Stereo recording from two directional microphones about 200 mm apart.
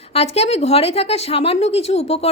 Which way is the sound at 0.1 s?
30° left (ahead or behind).